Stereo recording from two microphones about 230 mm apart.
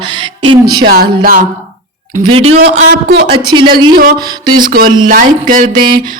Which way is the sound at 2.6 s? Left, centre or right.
Right.